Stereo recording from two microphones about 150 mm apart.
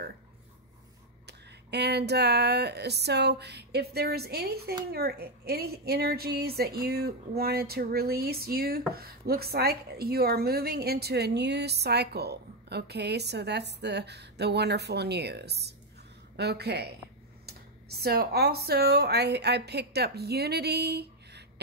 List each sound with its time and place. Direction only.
1.2 s a woman's voice: 90° right